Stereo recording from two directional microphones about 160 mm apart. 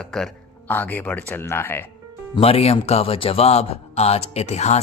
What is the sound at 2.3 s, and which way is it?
A man's voice, 35° left (ahead or behind).